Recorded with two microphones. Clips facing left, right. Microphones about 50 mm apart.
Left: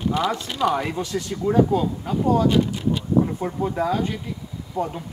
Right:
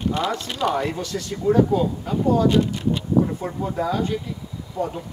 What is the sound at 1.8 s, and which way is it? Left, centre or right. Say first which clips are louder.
Speech: right 1 dB; left.